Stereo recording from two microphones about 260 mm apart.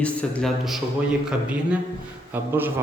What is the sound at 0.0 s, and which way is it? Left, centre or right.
A man's voice, centre.